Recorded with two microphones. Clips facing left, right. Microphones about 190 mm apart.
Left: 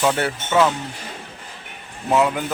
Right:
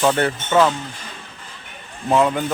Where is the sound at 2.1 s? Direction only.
10° left (ahead or behind).